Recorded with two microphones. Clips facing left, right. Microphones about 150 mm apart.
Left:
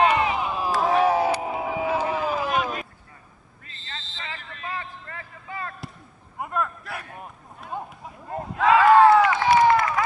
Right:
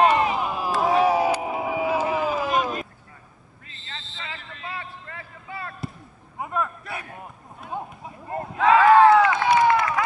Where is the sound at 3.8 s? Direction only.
40° left (ahead or behind).